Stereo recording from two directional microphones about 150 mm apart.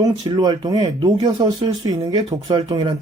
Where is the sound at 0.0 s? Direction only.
25° right (ahead or behind).